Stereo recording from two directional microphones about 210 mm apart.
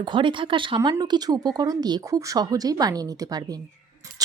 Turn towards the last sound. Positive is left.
turn(degrees=-15)  # may be behind; listen again after turning